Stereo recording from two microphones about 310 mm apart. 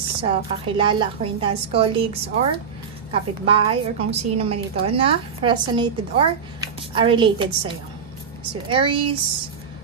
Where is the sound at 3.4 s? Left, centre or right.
Centre.